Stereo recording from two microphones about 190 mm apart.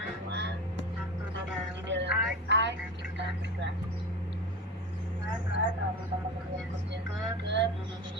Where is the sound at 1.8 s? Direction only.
70° right (ahead or behind).